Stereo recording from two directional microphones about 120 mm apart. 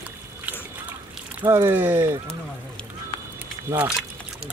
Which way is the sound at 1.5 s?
20° right (ahead or behind).